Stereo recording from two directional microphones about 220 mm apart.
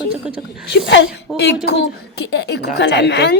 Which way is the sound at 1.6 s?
50° left (ahead or behind).